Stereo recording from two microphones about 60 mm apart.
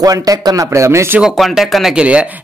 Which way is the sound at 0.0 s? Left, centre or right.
Right.